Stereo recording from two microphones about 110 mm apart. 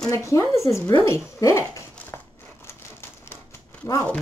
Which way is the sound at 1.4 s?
30° left (ahead or behind).